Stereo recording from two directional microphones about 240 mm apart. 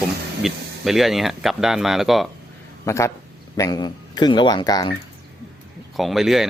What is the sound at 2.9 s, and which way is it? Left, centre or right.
Speech, centre.